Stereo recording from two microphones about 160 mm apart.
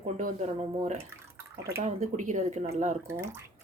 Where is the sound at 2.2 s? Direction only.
50° right (ahead or behind).